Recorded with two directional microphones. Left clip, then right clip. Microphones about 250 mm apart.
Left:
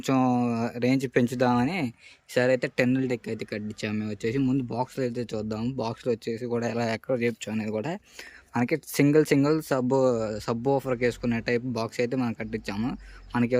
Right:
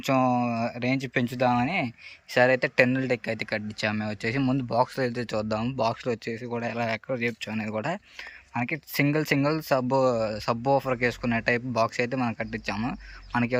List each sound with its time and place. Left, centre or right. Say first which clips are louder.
0.0 s speech: right 1 dB; centre